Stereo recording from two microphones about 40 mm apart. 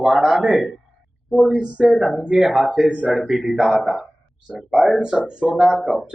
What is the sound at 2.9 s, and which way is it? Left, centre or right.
Speech, right.